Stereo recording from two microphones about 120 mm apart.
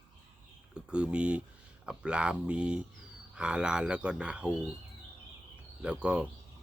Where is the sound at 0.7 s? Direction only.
10° right (ahead or behind).